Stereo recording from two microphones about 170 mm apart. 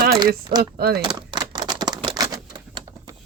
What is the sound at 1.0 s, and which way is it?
Typewriter, 25° right (ahead or behind).